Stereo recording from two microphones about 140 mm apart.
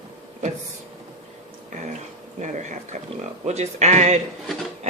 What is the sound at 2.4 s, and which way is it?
A man's voice, 60° right (ahead or behind).